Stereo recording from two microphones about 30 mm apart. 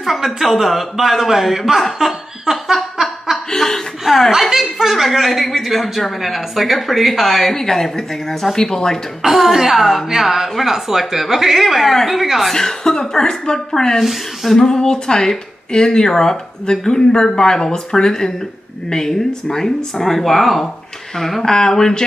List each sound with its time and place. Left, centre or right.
0.0 s a man's voice: centre
2.0 s speech: right
2.5 s a sound: centre
3.5 s chuckle: centre
4.0 s chuckle: centre
4.6 s a woman's voice: centre
7.5 s speech: centre
9.3 s a woman's voice: centre
12.5 s speech: centre
21.2 s speech: centre